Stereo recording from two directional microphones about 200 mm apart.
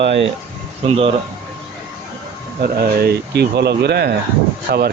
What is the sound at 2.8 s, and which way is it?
Speech, 50° right (ahead or behind).